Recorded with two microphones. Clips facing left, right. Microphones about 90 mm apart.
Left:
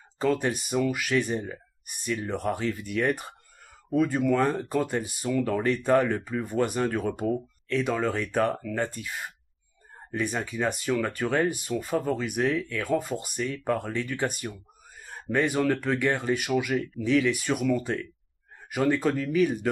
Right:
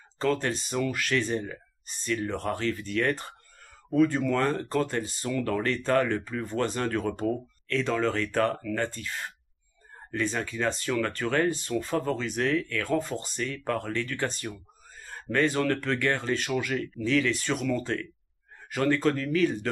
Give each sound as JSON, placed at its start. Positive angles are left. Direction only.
{"t": 0.2, "sound": "speech", "side_deg": 15}